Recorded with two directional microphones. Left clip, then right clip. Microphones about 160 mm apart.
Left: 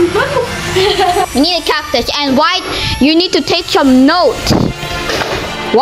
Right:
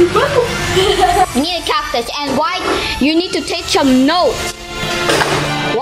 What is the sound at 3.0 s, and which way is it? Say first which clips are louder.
A woman's voice: left 4 dB; 35° left (ahead or behind).